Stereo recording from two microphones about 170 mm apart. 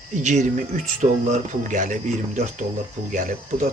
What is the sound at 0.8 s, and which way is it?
Speech, 45° right (ahead or behind).